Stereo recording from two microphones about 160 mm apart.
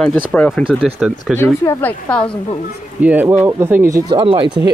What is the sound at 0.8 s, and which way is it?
Speech, centre (ahead or behind).